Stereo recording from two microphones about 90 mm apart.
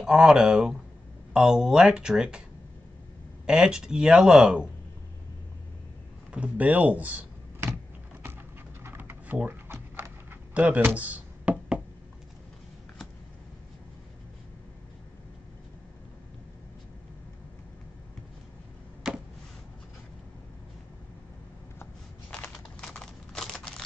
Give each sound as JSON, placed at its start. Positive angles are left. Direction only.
{"t": 0.0, "sound": "speech", "side_deg": -5}
{"t": 3.4, "sound": "speech", "side_deg": -10}
{"t": 6.3, "sound": "speech", "side_deg": -15}
{"t": 8.8, "sound": "pigeon", "side_deg": -25}
{"t": 9.5, "sound": "a sound", "side_deg": -25}
{"t": 22.8, "sound": "a sound", "side_deg": 5}